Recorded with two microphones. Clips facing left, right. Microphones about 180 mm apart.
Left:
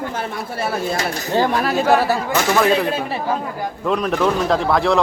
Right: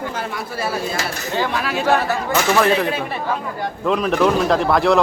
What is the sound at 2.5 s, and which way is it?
Speech, centre (ahead or behind).